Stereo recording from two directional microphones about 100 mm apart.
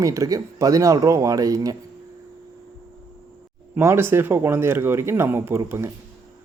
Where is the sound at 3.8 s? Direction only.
25° right (ahead or behind).